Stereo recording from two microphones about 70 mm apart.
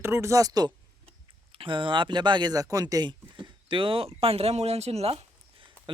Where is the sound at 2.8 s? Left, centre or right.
Right.